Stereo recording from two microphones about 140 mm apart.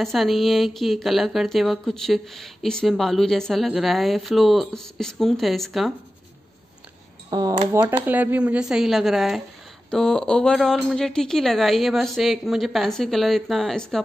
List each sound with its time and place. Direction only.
0.0 s speech: centre (ahead or behind)
7.2 s speech: 30° right (ahead or behind)
7.8 s speech: 10° right (ahead or behind); by 14.0 s 5° left (ahead or behind)